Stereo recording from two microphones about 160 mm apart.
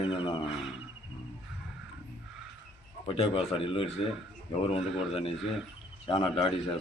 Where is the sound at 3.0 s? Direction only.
35° left (ahead or behind).